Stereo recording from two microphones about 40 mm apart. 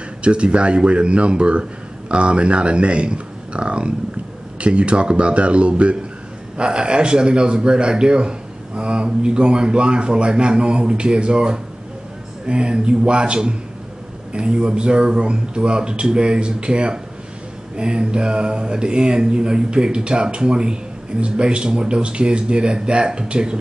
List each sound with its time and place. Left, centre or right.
0.2 s speech: right